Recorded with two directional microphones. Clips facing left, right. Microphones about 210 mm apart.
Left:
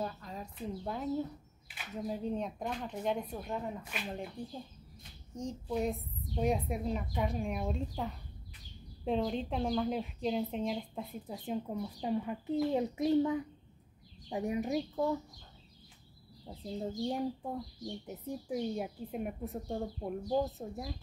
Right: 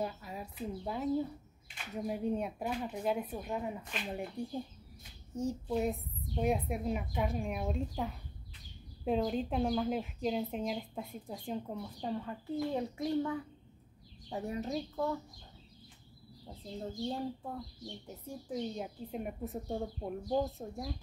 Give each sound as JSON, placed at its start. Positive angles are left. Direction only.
{"t": 0.0, "sound": "a woman's voice", "side_deg": -10}
{"t": 17.0, "sound": "a woman's voice", "side_deg": 15}